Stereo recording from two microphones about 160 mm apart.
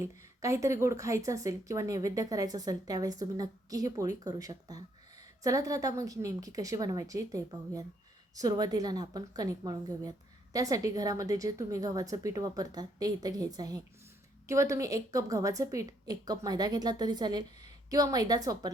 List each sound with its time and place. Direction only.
0.0 s a woman's voice: 20° right (ahead or behind)